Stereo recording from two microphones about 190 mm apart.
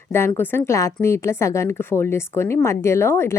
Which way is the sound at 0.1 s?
10° left (ahead or behind).